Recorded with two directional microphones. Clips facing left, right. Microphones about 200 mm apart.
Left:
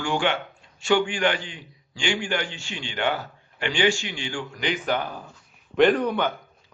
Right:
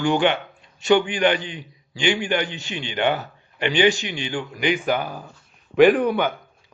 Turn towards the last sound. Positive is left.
turn(degrees=-10)  # may be behind; listen again after turning